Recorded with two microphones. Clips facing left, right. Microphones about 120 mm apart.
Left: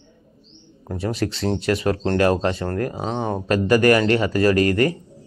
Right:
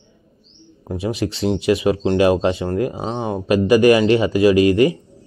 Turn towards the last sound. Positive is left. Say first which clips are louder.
# right 4 dB
turn(degrees=-15)  # may be behind; listen again after turning